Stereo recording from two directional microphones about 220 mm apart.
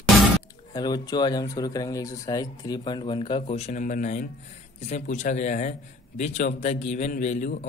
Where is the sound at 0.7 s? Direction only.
20° left (ahead or behind).